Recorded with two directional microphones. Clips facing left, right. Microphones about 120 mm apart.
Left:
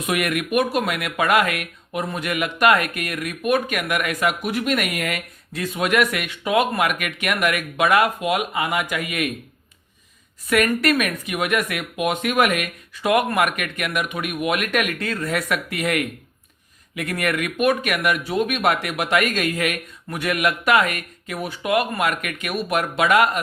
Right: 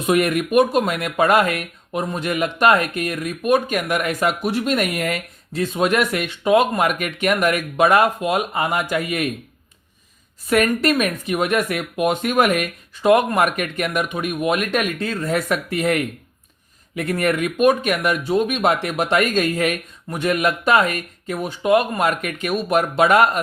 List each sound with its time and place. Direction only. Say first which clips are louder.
0.0 s speech: right 5 dB; 30° right (ahead or behind)
10.5 s speech: right 1 dB; 30° right (ahead or behind)